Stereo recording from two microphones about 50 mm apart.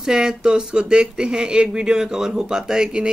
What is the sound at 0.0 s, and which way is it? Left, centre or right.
Speech, centre.